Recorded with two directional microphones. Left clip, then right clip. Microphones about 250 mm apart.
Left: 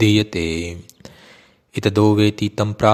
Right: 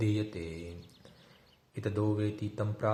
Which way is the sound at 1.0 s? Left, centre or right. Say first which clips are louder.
Left 16 dB; left.